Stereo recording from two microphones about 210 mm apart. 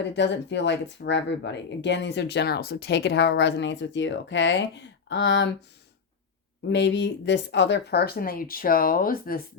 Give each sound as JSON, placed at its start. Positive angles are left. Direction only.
{"t": 0.0, "sound": "speech", "side_deg": 55}
{"t": 6.7, "sound": "speech", "side_deg": 55}